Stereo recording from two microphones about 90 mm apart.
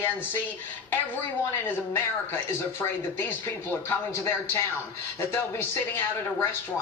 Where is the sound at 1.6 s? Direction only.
25° left (ahead or behind).